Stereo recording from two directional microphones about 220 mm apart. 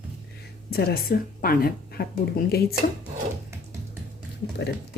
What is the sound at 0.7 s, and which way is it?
Speech, 45° left (ahead or behind).